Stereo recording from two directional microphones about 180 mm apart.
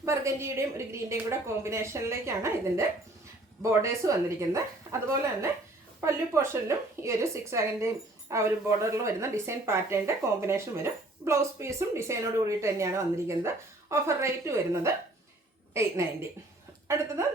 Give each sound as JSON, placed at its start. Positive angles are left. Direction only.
{"t": 0.0, "sound": "a woman's voice", "side_deg": -15}
{"t": 16.9, "sound": "a woman's voice", "side_deg": -15}